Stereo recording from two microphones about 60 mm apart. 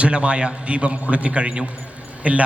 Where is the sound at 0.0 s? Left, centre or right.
Centre.